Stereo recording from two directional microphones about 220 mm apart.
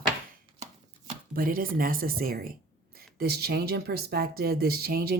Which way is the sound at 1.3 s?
40° right (ahead or behind).